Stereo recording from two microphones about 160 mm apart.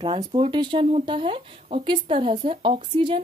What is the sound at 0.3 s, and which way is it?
Speech, 30° right (ahead or behind).